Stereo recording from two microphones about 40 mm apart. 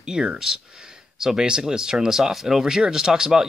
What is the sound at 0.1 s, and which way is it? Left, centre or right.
Speech, right.